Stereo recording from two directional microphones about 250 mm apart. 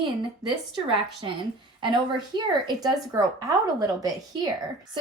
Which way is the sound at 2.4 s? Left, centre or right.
Centre.